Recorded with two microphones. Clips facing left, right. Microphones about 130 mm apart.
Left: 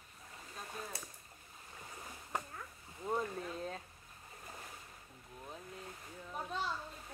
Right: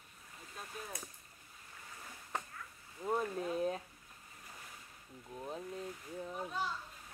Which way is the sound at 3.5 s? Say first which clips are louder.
Right 7 dB; 15° right (ahead or behind).